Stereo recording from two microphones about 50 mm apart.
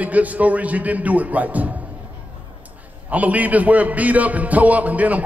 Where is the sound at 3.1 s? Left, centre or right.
Right.